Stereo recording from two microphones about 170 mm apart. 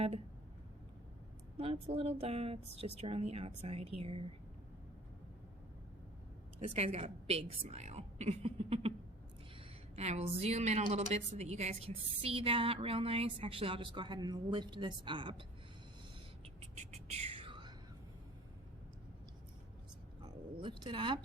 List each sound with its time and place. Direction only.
1.5 s a woman's voice: 35° right (ahead or behind)
6.6 s a woman's voice: 40° right (ahead or behind)
16.6 s whispering: 40° right (ahead or behind)
20.2 s a sound: 25° right (ahead or behind)